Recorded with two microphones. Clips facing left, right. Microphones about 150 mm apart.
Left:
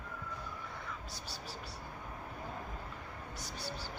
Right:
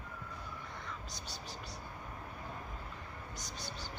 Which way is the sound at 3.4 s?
10° left (ahead or behind).